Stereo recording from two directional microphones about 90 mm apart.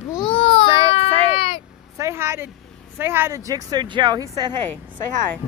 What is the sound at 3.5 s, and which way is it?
Speech, 50° right (ahead or behind).